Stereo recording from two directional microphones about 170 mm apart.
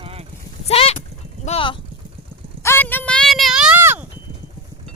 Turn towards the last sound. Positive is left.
turn(degrees=-10)  # may be behind; listen again after turning